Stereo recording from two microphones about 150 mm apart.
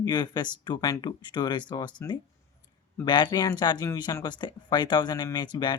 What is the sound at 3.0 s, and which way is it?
Speech, 30° left (ahead or behind).